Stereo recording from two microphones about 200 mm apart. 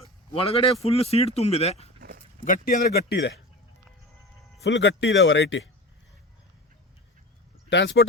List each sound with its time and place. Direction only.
0.3 s speech: 30° left (ahead or behind)
2.0 s a sound: 50° right (ahead or behind)
2.4 s a man's voice: 45° left (ahead or behind)
4.6 s speech: 60° left (ahead or behind)
7.7 s speech: 60° left (ahead or behind)